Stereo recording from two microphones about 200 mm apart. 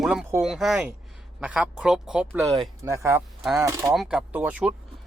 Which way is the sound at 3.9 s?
Centre (ahead or behind).